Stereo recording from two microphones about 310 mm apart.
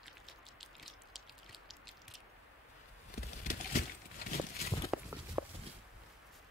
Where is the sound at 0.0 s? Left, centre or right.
Centre.